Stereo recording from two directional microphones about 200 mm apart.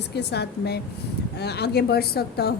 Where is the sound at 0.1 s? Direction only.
55° left (ahead or behind).